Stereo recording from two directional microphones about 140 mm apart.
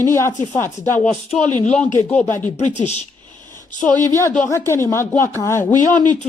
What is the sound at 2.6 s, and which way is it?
Speech, 55° left (ahead or behind).